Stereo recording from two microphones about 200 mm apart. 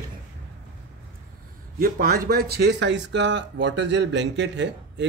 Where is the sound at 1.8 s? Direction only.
45° right (ahead or behind).